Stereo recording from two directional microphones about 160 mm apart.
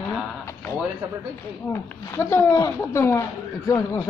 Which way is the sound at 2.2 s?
15° left (ahead or behind).